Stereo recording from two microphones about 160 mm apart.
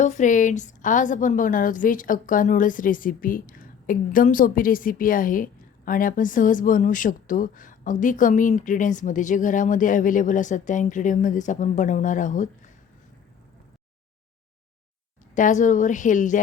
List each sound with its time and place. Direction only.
0.0 s a woman's voice: 50° left (ahead or behind)
15.4 s a woman's voice: 50° left (ahead or behind)